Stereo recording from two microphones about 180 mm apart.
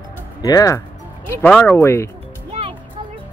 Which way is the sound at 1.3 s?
5° left (ahead or behind).